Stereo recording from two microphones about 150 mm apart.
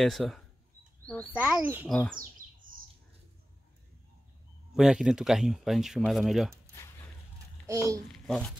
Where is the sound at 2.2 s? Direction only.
65° right (ahead or behind).